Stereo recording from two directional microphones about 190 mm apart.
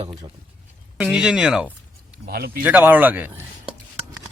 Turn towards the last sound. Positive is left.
turn(degrees=-10)  # may be behind; listen again after turning